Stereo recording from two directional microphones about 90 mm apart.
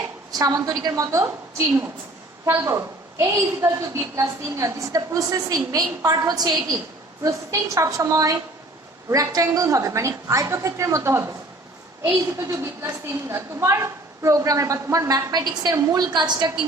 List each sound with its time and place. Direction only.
0.3 s a woman's voice: 45° right (ahead or behind)
1.2 s a woman's voice: 25° right (ahead or behind); by 6.6 s 45° right (ahead or behind)
7.2 s a woman's voice: 35° right (ahead or behind)
12.4 s a woman's voice: 40° right (ahead or behind); by 16.5 s 55° right (ahead or behind)